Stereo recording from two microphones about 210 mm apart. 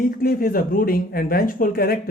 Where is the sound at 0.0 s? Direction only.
45° left (ahead or behind).